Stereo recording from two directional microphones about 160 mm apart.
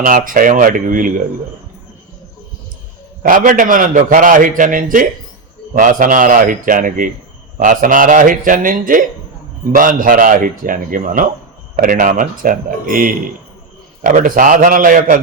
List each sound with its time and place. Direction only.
0.0 s a man's voice: 60° right (ahead or behind)
3.2 s a man's voice: 60° right (ahead or behind)